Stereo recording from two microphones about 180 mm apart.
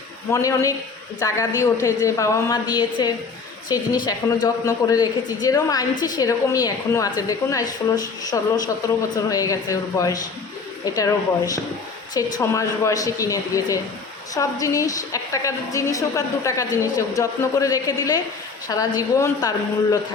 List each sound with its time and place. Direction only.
0.3 s a woman's voice: 15° left (ahead or behind)